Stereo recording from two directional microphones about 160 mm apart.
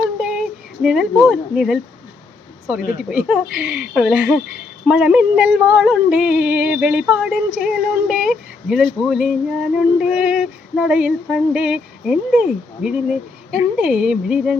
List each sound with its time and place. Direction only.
0.2 s speech: 5° right (ahead or behind)
3.0 s female singing: 5° right (ahead or behind)
4.9 s yodeling: 5° right (ahead or behind)
9.0 s female singing: 5° right (ahead or behind)